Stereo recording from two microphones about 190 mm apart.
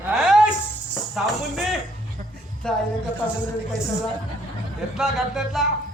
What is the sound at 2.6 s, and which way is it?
Speech, 5° left (ahead or behind).